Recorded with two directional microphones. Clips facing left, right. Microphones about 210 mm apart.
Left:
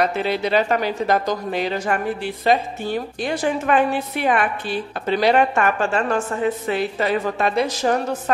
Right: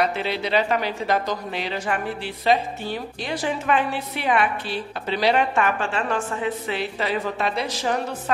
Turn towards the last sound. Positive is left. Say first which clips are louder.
# left 5 dB
turn(degrees=45)  # may be behind; listen again after turning